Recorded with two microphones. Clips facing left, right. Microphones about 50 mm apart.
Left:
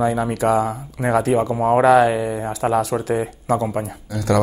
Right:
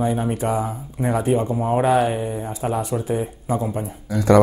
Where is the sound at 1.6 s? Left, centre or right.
Left.